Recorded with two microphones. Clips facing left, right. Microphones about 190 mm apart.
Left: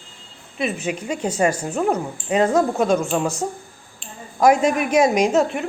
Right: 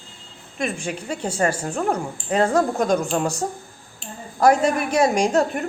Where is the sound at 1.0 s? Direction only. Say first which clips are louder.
Left 2 dB; 10° left (ahead or behind).